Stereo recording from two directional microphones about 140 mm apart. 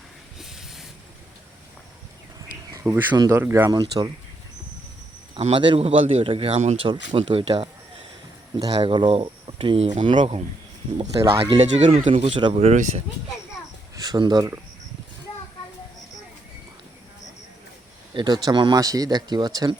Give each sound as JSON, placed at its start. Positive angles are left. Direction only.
{"t": 0.3, "sound": "hiss", "side_deg": 0}
{"t": 2.7, "sound": "speech", "side_deg": -15}
{"t": 3.7, "sound": "speech", "side_deg": -30}
{"t": 5.3, "sound": "a man's voice", "side_deg": -45}
{"t": 6.8, "sound": "a man's voice", "side_deg": -35}
{"t": 8.5, "sound": "a man's voice", "side_deg": -30}
{"t": 11.6, "sound": "speech", "side_deg": -55}
{"t": 12.5, "sound": "speech", "side_deg": -55}
{"t": 13.9, "sound": "speech", "side_deg": -30}
{"t": 18.1, "sound": "a man's voice", "side_deg": -35}